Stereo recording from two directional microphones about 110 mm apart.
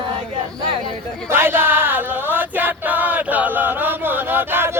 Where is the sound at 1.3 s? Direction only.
20° right (ahead or behind).